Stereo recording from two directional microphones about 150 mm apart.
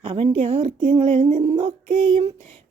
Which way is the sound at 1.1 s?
60° right (ahead or behind).